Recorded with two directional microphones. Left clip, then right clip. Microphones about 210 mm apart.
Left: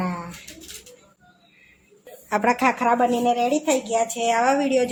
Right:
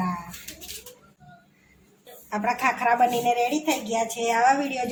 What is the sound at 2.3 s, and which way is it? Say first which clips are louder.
A woman's voice: left 4 dB; 50° left (ahead or behind).